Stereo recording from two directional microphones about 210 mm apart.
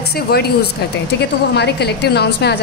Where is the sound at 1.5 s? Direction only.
50° left (ahead or behind).